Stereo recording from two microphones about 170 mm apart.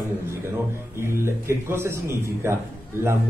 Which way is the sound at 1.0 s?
15° right (ahead or behind).